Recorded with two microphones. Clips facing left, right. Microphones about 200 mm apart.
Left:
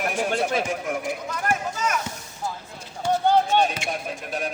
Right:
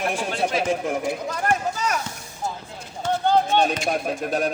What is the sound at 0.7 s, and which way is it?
Speech, 30° right (ahead or behind).